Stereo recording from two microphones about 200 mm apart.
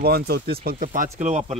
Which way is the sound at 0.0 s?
50° right (ahead or behind).